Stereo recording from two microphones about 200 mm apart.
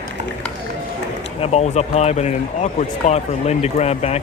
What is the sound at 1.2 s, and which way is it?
Speech, 30° left (ahead or behind).